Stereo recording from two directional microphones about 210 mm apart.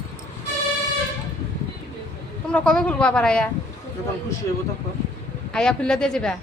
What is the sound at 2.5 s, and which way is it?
Speech, 5° left (ahead or behind).